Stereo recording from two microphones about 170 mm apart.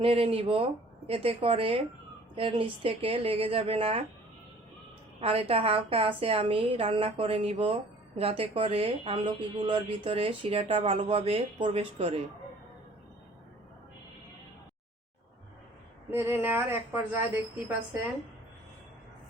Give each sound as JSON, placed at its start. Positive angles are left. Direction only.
{"t": 0.0, "sound": "a woman's voice", "side_deg": -35}
{"t": 5.2, "sound": "a woman's voice", "side_deg": -35}
{"t": 16.0, "sound": "a woman's voice", "side_deg": -15}